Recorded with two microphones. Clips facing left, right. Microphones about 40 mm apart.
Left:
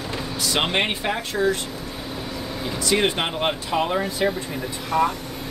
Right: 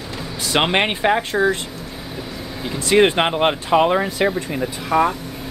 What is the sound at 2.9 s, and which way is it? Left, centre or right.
Speech, right.